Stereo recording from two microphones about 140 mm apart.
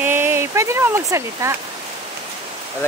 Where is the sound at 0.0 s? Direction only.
15° right (ahead or behind).